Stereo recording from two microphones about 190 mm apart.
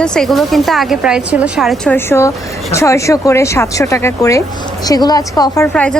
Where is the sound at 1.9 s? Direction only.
15° left (ahead or behind).